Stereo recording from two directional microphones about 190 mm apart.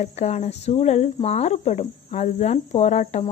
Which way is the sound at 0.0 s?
35° left (ahead or behind).